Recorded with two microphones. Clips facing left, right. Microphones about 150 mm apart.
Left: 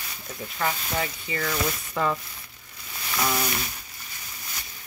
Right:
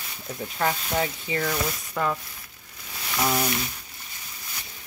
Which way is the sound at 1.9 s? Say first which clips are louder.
Left 1 dB; centre (ahead or behind).